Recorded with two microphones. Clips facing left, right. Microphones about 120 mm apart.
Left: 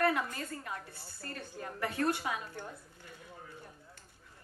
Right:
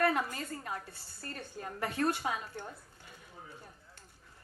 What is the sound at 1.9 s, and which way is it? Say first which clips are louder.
Speech: even; 30° right (ahead or behind).